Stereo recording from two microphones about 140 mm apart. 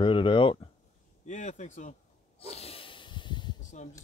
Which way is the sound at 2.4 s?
45° left (ahead or behind).